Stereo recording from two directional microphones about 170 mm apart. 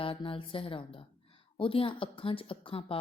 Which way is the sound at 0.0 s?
30° left (ahead or behind).